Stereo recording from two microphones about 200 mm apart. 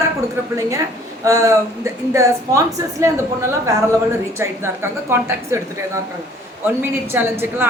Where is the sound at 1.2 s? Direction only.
15° right (ahead or behind).